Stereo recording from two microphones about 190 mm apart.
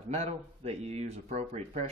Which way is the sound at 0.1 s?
35° right (ahead or behind).